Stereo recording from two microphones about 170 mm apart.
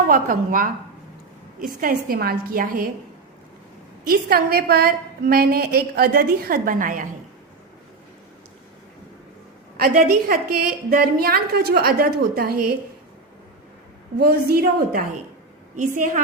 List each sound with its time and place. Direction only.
0.1 s a woman's voice: 50° right (ahead or behind)
4.0 s a woman's voice: 60° right (ahead or behind)
9.7 s a woman's voice: 60° right (ahead or behind)
14.2 s a woman's voice: 65° right (ahead or behind); by 16.2 s 50° right (ahead or behind)